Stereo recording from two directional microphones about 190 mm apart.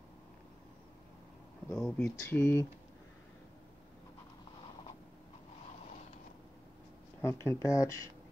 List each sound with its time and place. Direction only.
1.7 s speech: 5° left (ahead or behind)
7.2 s speech: 15° left (ahead or behind)